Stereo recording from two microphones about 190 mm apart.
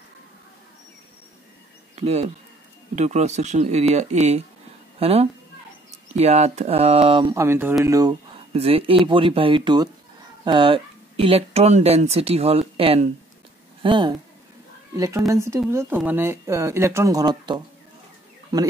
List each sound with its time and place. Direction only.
2.0 s speech: 35° right (ahead or behind)
7.3 s speech: 10° right (ahead or behind)
8.5 s speech: 30° right (ahead or behind)